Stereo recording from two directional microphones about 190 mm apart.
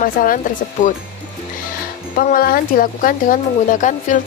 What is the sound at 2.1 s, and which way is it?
Speech, 50° left (ahead or behind).